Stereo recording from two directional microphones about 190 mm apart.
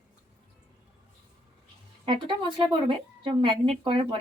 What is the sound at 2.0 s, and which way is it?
Speech, 25° right (ahead or behind).